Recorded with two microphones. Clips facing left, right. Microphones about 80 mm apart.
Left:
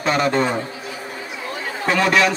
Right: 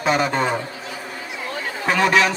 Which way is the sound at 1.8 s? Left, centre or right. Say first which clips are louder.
Even; centre.